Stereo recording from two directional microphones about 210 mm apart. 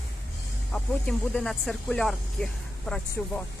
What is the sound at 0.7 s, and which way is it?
Speech, 5° left (ahead or behind).